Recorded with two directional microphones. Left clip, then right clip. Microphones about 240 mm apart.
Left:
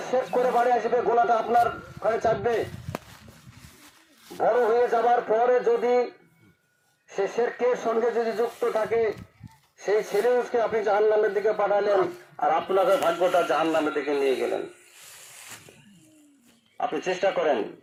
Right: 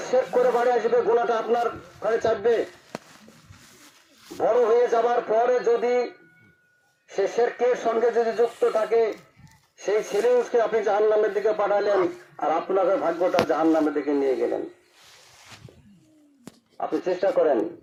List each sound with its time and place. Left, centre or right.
0.0 s a man's voice: right
4.4 s a man's voice: right
7.1 s a man's voice: right
16.7 s speech: right